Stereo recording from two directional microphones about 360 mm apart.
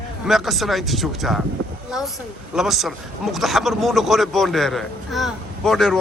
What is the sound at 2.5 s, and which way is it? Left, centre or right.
A man's voice, centre.